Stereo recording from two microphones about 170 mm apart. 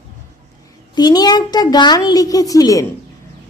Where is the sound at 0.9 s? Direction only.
25° left (ahead or behind).